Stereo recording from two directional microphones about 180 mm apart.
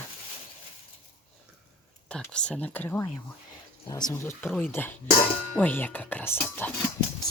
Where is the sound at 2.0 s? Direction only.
5° left (ahead or behind).